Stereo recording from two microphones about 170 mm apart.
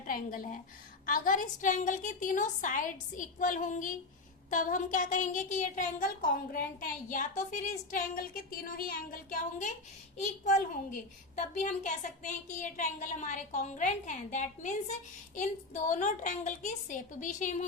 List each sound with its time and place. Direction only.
0.1 s a woman's voice: 55° left (ahead or behind)